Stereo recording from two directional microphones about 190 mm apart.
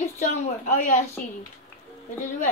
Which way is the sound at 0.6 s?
40° left (ahead or behind).